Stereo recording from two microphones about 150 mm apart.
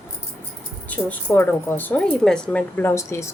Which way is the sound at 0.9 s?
10° left (ahead or behind).